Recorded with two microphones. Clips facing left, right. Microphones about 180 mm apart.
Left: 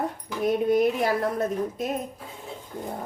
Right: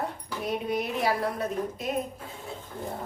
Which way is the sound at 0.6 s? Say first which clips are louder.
Left 7 dB; 50° left (ahead or behind).